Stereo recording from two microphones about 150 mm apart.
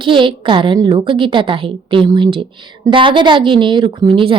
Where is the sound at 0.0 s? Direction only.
35° right (ahead or behind).